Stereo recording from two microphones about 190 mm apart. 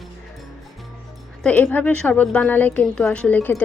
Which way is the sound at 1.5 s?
10° left (ahead or behind).